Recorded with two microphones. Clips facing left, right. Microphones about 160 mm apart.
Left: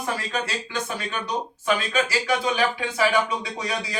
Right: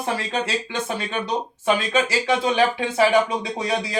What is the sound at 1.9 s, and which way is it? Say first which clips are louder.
Speech: right 3 dB; 30° right (ahead or behind).